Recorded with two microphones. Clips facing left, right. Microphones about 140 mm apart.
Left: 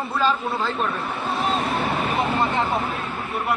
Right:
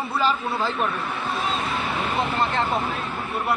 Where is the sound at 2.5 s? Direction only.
10° left (ahead or behind).